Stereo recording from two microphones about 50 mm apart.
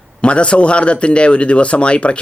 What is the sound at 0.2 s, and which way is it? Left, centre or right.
Speech, left.